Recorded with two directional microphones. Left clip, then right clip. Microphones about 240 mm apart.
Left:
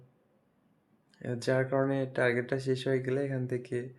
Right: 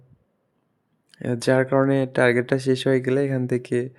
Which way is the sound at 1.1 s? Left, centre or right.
Right.